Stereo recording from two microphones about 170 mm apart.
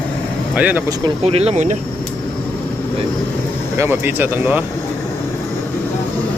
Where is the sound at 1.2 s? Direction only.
35° right (ahead or behind).